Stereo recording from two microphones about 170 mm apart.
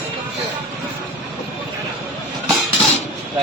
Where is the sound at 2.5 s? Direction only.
Centre (ahead or behind).